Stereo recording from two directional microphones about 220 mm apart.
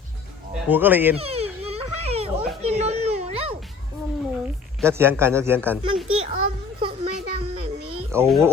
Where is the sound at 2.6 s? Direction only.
30° right (ahead or behind).